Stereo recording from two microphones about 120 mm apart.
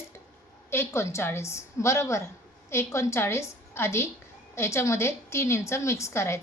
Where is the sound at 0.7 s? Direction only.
20° left (ahead or behind).